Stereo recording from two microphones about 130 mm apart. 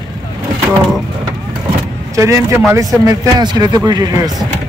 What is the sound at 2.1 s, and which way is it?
A man's voice, 25° right (ahead or behind).